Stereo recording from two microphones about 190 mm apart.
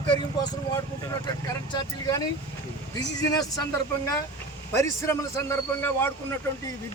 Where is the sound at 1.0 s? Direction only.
20° left (ahead or behind).